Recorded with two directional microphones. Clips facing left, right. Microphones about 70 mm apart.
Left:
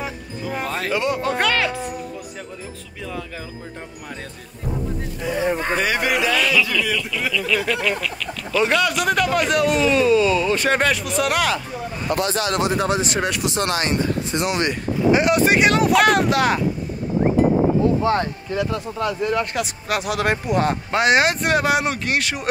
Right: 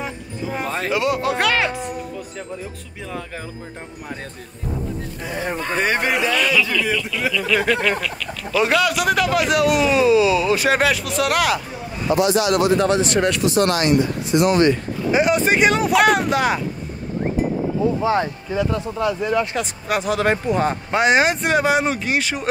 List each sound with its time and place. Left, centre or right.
0.7 s a sound: right
0.9 s speech: centre
1.6 s speech: right
5.2 s speech: centre
5.8 s speech: right
6.3 s speech: centre
12.1 s speech: left
12.7 s speech: centre
13.5 s speech: left
13.7 s speech: left
14.5 s speech: centre
15.0 s speech: centre
18.0 s speech: centre